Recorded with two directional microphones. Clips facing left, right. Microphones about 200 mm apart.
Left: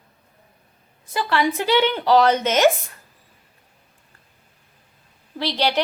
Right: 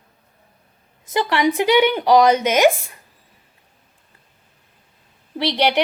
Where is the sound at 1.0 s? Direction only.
20° right (ahead or behind).